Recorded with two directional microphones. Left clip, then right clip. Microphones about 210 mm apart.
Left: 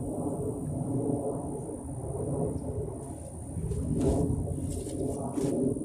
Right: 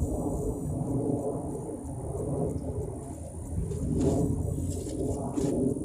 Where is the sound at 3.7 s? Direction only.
Centre (ahead or behind).